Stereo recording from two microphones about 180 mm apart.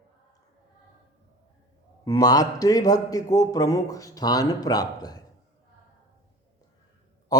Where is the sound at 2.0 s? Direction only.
20° left (ahead or behind).